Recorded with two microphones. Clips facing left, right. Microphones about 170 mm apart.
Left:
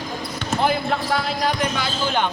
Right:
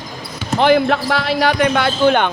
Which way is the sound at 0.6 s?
90° right.